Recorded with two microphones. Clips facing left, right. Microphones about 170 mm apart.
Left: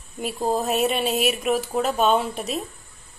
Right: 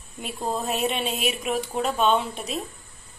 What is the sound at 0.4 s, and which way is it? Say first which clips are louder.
Speech: left 5 dB; 35° left (ahead or behind).